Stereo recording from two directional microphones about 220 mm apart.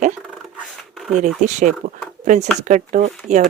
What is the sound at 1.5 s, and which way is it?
Speech, 35° right (ahead or behind).